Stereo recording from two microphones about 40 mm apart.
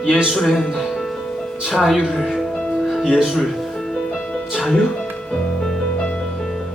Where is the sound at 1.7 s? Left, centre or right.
Centre.